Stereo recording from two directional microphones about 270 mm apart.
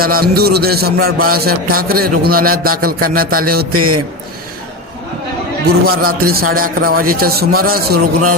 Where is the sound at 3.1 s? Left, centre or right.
Right.